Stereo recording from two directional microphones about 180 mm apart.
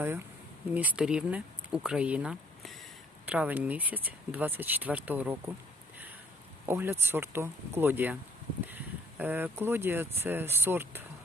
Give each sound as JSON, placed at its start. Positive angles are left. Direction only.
{"t": 0.7, "sound": "speech", "side_deg": -10}
{"t": 6.7, "sound": "speech", "side_deg": -15}